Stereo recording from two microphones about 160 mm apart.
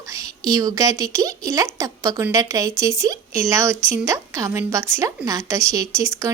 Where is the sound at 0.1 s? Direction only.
20° right (ahead or behind).